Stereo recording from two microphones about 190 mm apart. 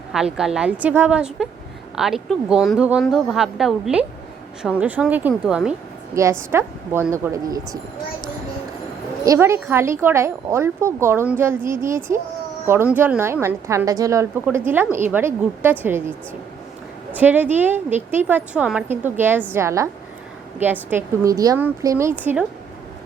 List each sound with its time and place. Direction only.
0.1 s speech: 5° right (ahead or behind)
9.2 s speech: 15° right (ahead or behind)
17.2 s speech: 10° right (ahead or behind)